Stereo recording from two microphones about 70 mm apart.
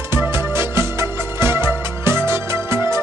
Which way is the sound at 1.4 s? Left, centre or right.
Right.